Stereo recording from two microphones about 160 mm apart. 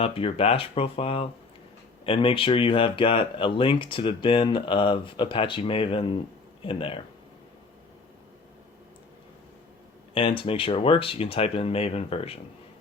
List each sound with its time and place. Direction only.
0.0 s speech: 35° left (ahead or behind)
10.2 s speech: 35° left (ahead or behind)